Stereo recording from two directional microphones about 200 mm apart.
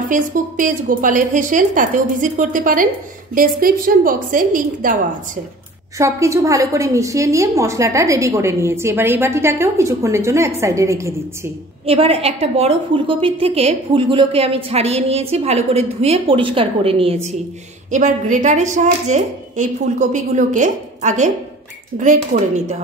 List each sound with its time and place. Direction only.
0.1 s a woman's voice: 40° right (ahead or behind)
5.9 s a woman's voice: 15° right (ahead or behind)
11.8 s a woman's voice: 30° right (ahead or behind)